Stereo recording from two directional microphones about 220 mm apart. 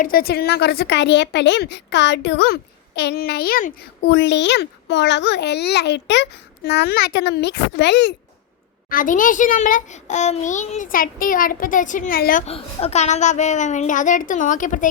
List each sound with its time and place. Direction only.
0.0 s a woman's voice: 40° left (ahead or behind)
8.9 s a child's voice: 40° left (ahead or behind)